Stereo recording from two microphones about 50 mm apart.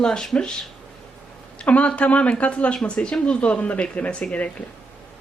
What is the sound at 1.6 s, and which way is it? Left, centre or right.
Speech, left.